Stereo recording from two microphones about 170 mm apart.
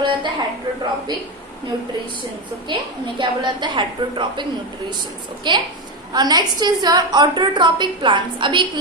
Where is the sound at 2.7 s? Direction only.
30° right (ahead or behind).